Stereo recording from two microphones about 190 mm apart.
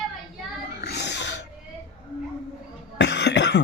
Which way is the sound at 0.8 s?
60° left (ahead or behind).